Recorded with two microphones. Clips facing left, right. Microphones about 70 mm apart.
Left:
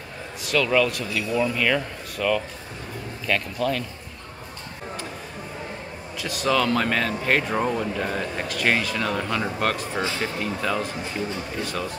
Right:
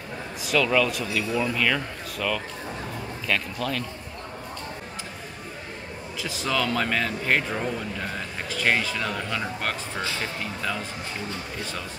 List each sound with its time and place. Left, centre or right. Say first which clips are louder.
0.5 s speech: left 1 dB; centre
6.2 s speech: left 4 dB; centre
7.5 s speech: left 5 dB; centre
8.0 s speech: left 5 dB; centre